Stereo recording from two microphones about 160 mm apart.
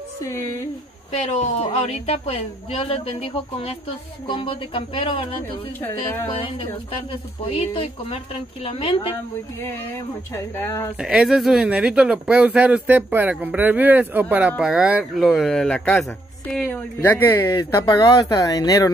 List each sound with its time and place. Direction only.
0.2 s speech: 20° left (ahead or behind)
1.1 s speech: 45° left (ahead or behind)
5.8 s speech: 10° left (ahead or behind)
7.1 s speech: 35° left (ahead or behind)
10.3 s speech: 15° left (ahead or behind)
11.0 s speech: 5° right (ahead or behind); by 18.9 s 25° left (ahead or behind)